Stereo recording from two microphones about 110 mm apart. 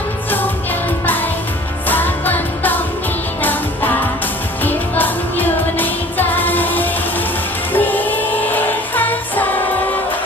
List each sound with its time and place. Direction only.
0.3 s music: 15° left (ahead or behind)